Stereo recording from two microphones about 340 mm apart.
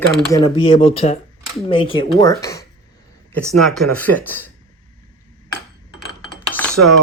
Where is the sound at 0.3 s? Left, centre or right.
Centre.